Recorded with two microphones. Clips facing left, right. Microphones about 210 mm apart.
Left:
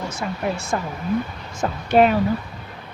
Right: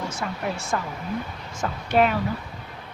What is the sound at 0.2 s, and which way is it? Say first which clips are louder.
Speech: left 4 dB; 20° left (ahead or behind).